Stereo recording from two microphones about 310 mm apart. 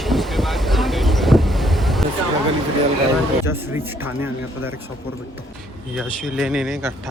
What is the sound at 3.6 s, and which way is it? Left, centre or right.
Speech, centre.